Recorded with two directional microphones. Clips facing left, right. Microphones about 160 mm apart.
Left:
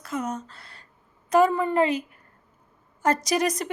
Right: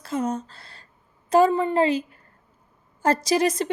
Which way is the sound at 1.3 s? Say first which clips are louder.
Right 2 dB; 30° right (ahead or behind).